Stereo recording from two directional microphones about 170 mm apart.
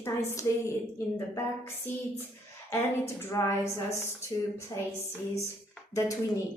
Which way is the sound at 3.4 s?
20° left (ahead or behind).